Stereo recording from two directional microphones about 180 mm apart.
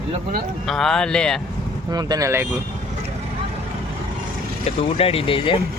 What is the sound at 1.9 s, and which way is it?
Speech, 20° right (ahead or behind).